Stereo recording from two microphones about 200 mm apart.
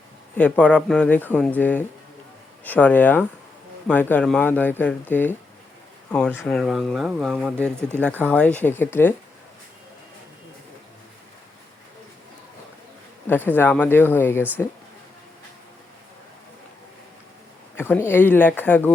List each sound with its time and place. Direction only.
0.3 s speech: 5° left (ahead or behind)
7.8 s speech: 10° right (ahead or behind)
8.0 s speech: 5° left (ahead or behind)
13.2 s speech: 10° left (ahead or behind)
17.7 s speech: 10° left (ahead or behind)